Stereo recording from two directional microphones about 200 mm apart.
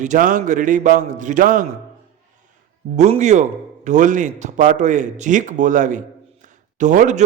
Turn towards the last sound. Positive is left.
turn(degrees=-40)  # may be behind; listen again after turning